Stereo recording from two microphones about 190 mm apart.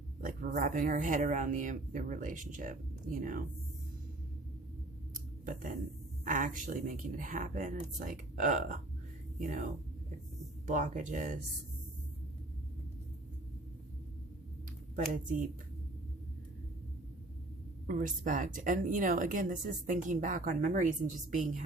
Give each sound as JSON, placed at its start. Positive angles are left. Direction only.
{"t": 0.2, "sound": "speech", "side_deg": -45}
{"t": 5.1, "sound": "scissors", "side_deg": -45}
{"t": 6.2, "sound": "speech", "side_deg": -45}
{"t": 10.7, "sound": "speech", "side_deg": -40}
{"t": 17.8, "sound": "speech", "side_deg": -45}